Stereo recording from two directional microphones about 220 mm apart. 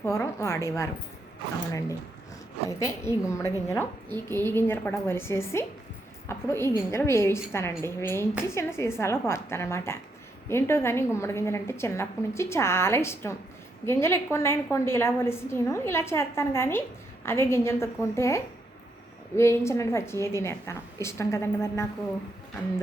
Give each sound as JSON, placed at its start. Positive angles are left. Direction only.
{"t": 0.0, "sound": "a woman's voice", "side_deg": 10}
{"t": 2.6, "sound": "a woman's voice", "side_deg": 15}